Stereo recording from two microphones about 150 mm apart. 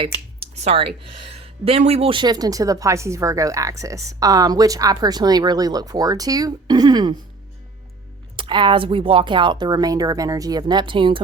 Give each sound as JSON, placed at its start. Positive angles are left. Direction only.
{"t": 0.0, "sound": "a woman's voice", "side_deg": -40}
{"t": 8.4, "sound": "speech", "side_deg": -30}